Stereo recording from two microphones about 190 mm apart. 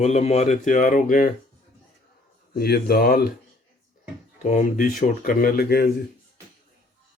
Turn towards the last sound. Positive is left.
turn(degrees=55)  # may be behind; listen again after turning